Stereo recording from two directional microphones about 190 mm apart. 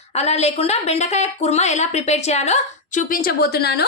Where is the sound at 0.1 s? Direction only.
35° left (ahead or behind).